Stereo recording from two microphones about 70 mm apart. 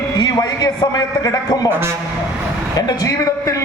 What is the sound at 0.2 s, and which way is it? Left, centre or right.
A man's voice, left.